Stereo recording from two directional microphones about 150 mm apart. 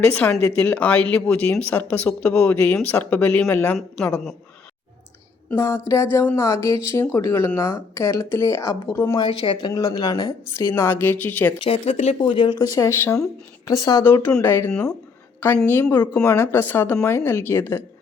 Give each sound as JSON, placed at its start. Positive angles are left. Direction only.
{"t": 0.0, "sound": "a woman's voice", "side_deg": 10}
{"t": 5.5, "sound": "speech", "side_deg": 15}
{"t": 9.2, "sound": "speech", "side_deg": 35}
{"t": 11.6, "sound": "speech", "side_deg": 45}
{"t": 12.2, "sound": "speech", "side_deg": 35}
{"t": 12.5, "sound": "speech", "side_deg": 20}
{"t": 14.1, "sound": "speech", "side_deg": 15}
{"t": 14.7, "sound": "a woman's voice", "side_deg": 5}